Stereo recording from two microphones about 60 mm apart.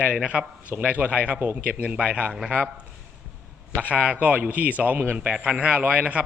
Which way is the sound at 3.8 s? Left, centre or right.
Right.